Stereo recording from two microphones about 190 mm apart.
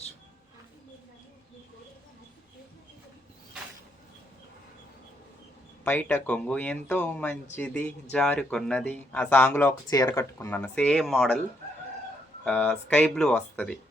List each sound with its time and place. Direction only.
5.8 s speech: 10° left (ahead or behind)
12.5 s speech: 10° left (ahead or behind)